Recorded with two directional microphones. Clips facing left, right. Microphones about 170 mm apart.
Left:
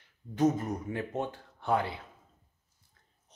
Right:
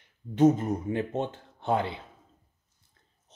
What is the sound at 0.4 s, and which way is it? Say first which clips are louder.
Speech: right 6 dB; 25° right (ahead or behind).